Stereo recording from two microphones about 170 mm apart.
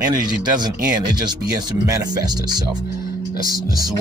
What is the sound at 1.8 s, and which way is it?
Speech, 20° right (ahead or behind).